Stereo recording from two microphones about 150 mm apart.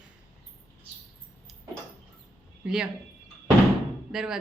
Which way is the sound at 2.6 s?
5° right (ahead or behind).